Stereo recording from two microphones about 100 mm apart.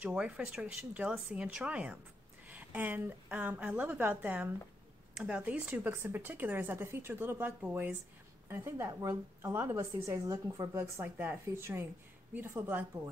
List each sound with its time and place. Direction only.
0.0 s a woman's voice: 10° right (ahead or behind); by 10.8 s 35° right (ahead or behind)
10.8 s speech: 20° right (ahead or behind)